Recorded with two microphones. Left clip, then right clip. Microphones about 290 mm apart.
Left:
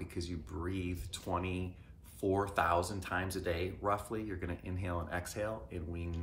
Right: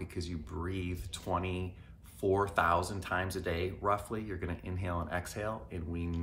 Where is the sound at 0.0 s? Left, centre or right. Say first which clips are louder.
Right 1 dB; centre.